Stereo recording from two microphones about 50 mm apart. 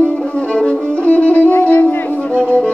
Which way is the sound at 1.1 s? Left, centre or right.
Left.